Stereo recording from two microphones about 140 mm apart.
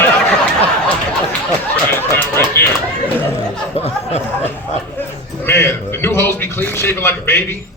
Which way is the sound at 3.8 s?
50° left (ahead or behind).